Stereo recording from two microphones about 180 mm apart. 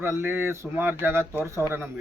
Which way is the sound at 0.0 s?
15° right (ahead or behind).